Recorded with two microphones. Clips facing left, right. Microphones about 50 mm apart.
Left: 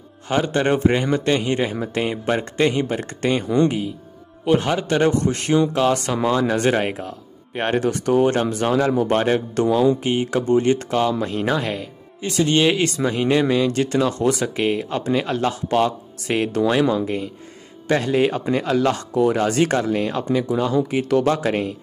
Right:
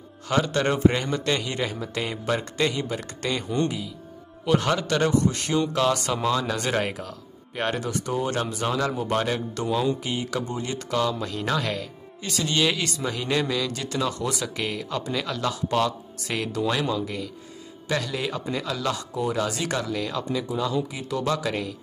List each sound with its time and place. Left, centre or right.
0.3 s speech: left
4.5 s a man's voice: left
5.1 s speech: left
11.4 s speech: left
12.3 s speech: left